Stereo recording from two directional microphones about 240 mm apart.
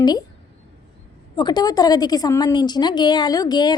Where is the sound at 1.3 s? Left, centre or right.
Centre.